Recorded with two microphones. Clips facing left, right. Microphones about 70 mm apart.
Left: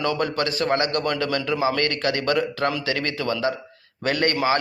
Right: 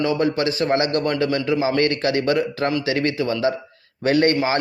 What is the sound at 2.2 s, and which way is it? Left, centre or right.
A man's voice, right.